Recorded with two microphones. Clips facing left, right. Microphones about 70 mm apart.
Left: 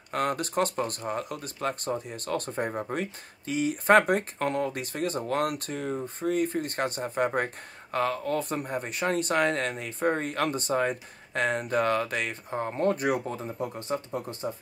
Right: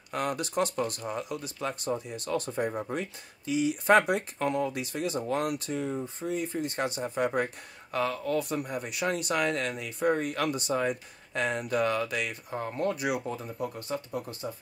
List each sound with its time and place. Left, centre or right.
0.1 s speech: left
13.3 s speech: left